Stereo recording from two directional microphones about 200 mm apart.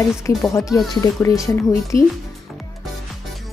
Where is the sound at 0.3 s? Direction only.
15° left (ahead or behind).